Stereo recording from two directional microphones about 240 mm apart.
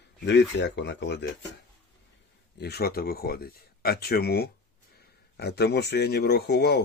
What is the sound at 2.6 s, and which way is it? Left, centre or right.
Speech, left.